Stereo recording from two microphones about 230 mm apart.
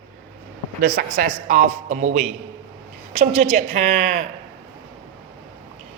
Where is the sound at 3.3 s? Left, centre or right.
Right.